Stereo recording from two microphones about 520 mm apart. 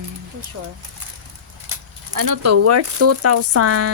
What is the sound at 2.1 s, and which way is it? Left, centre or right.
Speech, right.